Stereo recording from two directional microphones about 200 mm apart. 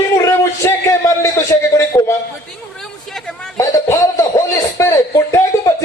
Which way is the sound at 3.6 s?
15° left (ahead or behind).